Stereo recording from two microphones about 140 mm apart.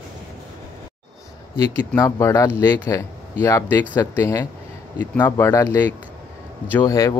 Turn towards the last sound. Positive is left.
turn(degrees=25)  # may be behind; listen again after turning